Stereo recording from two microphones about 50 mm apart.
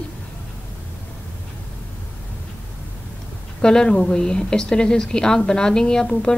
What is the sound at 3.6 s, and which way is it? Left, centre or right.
A woman's voice, centre.